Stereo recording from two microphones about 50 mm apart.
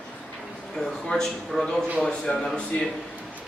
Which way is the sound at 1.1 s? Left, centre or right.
Left.